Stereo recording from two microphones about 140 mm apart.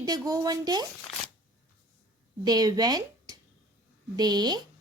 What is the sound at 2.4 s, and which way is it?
A woman's voice, 30° right (ahead or behind).